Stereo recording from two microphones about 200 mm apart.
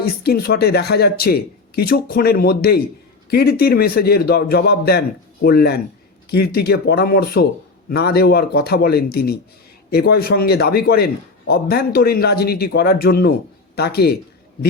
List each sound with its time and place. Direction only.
0.0 s a man's voice: 50° left (ahead or behind)